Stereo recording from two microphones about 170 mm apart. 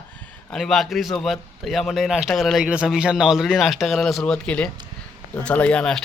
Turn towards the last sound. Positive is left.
turn(degrees=5)  # may be behind; listen again after turning